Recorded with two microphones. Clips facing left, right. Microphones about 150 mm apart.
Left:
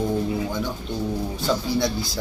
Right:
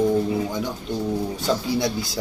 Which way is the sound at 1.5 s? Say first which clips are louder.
Right 1 dB; centre (ahead or behind).